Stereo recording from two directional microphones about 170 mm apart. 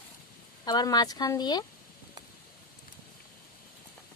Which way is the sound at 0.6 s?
25° left (ahead or behind).